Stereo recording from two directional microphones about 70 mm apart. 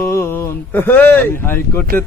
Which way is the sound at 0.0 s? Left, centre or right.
Left.